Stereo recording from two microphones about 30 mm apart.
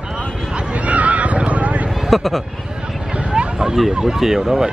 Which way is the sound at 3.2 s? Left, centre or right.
Right.